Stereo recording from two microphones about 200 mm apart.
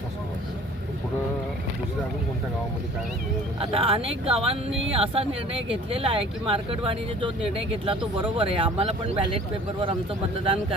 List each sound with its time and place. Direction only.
3.6 s speech: 30° right (ahead or behind)
10.4 s speech: 25° right (ahead or behind)